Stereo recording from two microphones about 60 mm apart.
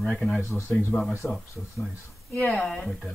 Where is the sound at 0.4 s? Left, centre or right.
Left.